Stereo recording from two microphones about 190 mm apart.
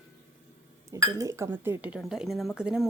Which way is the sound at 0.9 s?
15° right (ahead or behind).